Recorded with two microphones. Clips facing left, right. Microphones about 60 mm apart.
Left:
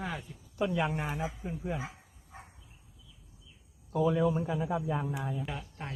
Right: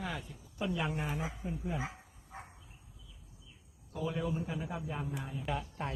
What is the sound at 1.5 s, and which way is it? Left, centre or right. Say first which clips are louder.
Speech: left 2 dB; left.